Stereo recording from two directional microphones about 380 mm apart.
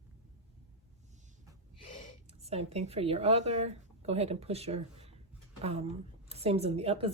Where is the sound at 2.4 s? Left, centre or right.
Centre.